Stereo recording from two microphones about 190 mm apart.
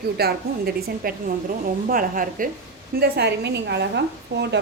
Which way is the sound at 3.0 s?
60° right (ahead or behind).